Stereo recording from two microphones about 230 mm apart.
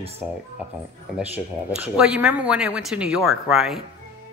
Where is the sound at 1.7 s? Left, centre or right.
Centre.